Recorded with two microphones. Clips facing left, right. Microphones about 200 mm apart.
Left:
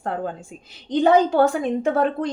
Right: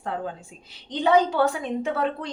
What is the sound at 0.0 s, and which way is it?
A woman's voice, 50° left (ahead or behind).